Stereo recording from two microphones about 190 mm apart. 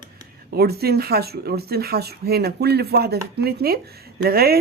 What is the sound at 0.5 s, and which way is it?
Speech, 55° right (ahead or behind).